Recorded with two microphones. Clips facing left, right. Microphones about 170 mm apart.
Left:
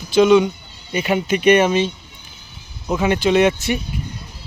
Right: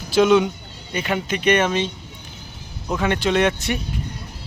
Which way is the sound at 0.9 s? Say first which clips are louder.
Left 5 dB; 10° left (ahead or behind).